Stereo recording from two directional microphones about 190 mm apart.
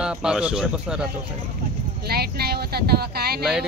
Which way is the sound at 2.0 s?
55° right (ahead or behind).